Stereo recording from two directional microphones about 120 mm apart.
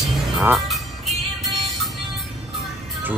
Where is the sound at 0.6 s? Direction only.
Centre (ahead or behind).